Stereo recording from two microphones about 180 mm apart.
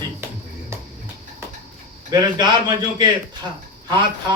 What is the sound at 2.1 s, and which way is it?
Speech, 25° right (ahead or behind).